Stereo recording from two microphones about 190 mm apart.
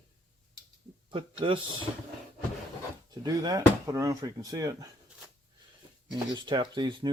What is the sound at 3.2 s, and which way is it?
Speech, 20° right (ahead or behind).